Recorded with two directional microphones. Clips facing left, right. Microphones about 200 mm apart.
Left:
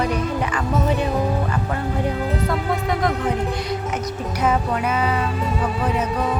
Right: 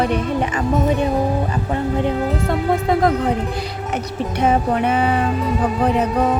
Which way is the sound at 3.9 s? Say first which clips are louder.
Right 3 dB; 30° right (ahead or behind).